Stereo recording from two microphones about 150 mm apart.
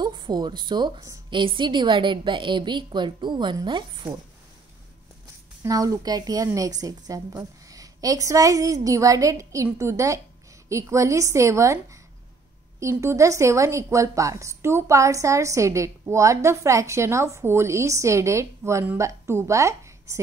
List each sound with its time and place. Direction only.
0.0 s a woman's voice: 30° right (ahead or behind)
5.6 s a woman's voice: 25° right (ahead or behind)